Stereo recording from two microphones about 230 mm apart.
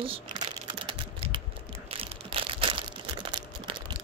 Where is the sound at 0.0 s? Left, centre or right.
Right.